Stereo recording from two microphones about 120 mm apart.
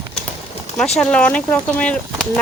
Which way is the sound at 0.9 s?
10° left (ahead or behind).